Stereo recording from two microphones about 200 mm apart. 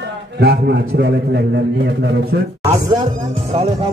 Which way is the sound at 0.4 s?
55° right (ahead or behind).